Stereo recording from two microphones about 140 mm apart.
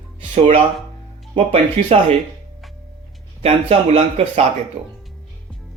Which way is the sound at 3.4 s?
45° right (ahead or behind).